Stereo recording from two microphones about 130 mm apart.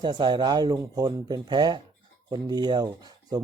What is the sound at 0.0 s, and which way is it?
Speech, 35° right (ahead or behind).